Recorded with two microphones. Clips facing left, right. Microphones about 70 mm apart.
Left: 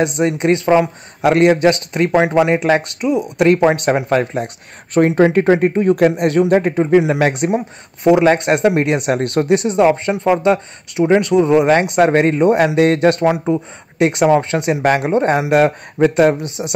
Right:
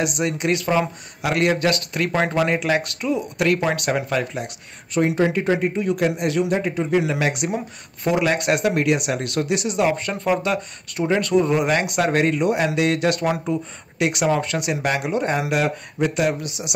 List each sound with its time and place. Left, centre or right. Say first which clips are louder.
0.0 s speech: left 7 dB; left